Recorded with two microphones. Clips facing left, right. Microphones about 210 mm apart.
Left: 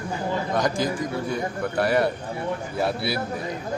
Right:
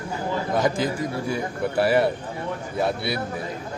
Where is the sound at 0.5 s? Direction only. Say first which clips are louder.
Right 2 dB; 5° right (ahead or behind).